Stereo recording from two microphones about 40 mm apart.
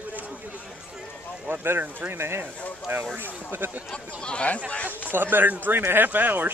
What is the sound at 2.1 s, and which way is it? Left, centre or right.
Speech, right.